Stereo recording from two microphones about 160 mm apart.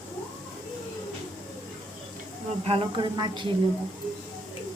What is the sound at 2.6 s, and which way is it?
Speech, 35° right (ahead or behind).